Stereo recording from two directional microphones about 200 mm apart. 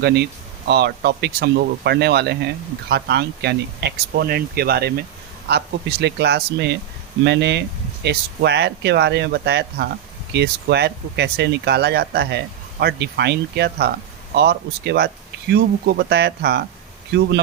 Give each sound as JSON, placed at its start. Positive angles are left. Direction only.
{"t": 0.0, "sound": "speech", "side_deg": -55}